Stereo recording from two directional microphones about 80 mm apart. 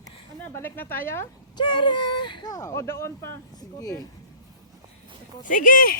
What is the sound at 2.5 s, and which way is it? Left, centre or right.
Speech, left.